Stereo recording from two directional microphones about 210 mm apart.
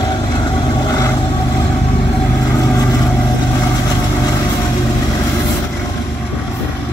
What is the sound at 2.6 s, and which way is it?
Vehicle, 15° left (ahead or behind).